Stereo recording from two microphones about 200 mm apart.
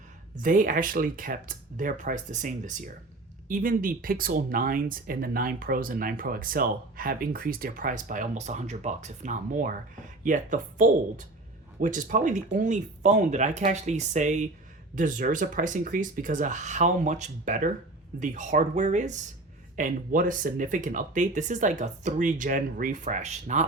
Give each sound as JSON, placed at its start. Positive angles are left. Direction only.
{"t": 0.4, "sound": "speech", "side_deg": -40}